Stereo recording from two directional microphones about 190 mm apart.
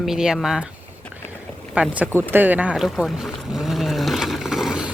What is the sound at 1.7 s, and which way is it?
Speech, 5° right (ahead or behind).